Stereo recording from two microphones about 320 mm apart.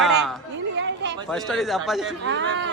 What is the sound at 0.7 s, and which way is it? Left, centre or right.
Chatter, right.